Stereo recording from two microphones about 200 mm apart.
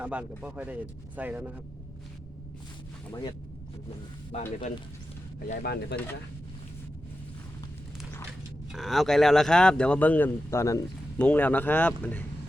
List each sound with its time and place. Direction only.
0.0 s speech: 5° right (ahead or behind)
4.3 s speech: 35° left (ahead or behind)
5.6 s speech: 55° left (ahead or behind)
8.7 s speech: centre (ahead or behind)